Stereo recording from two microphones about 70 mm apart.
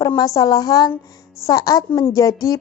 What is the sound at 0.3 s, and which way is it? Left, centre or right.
A woman's voice, left.